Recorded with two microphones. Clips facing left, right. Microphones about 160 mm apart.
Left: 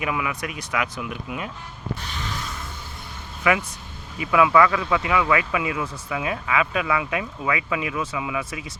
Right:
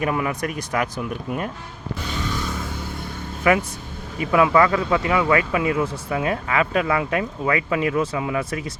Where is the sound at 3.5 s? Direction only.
40° right (ahead or behind).